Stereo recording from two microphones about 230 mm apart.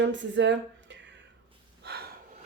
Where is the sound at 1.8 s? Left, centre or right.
Right.